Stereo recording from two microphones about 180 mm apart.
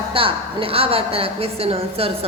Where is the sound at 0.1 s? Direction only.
30° right (ahead or behind).